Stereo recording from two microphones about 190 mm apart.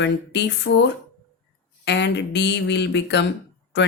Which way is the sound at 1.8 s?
65° left (ahead or behind).